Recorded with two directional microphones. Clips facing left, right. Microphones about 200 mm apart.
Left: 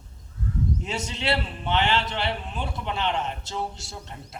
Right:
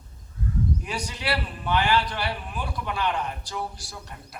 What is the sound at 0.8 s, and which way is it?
A man's voice, 25° left (ahead or behind).